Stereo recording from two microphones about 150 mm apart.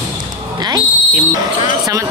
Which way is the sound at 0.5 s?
25° right (ahead or behind).